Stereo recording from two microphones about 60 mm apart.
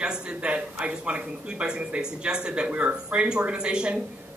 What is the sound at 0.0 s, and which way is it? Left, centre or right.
Speech, centre.